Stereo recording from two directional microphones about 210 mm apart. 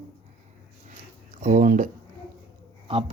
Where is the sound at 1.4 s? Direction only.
40° right (ahead or behind).